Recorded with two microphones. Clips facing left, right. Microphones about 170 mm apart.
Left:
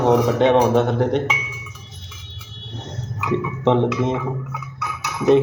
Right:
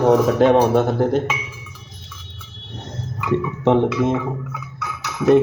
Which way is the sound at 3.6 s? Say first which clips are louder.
Right 1 dB; 5° right (ahead or behind).